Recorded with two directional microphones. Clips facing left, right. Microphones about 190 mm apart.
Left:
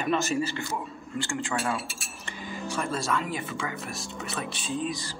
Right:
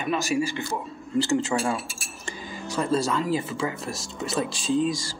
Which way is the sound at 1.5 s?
25° right (ahead or behind).